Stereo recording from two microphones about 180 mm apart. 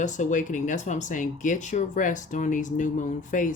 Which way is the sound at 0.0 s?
45° left (ahead or behind).